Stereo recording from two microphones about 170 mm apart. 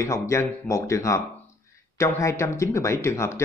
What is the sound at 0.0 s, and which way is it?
Speech, 15° left (ahead or behind).